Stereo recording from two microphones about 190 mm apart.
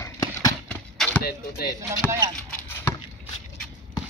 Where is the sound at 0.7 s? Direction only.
5° left (ahead or behind).